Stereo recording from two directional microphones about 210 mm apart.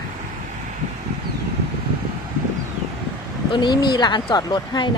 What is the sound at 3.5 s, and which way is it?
Speech, 20° left (ahead or behind).